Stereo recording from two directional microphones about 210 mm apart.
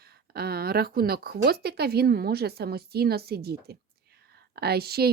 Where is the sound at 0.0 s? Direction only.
50° right (ahead or behind).